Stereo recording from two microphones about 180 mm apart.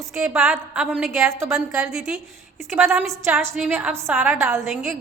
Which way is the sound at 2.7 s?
10° right (ahead or behind).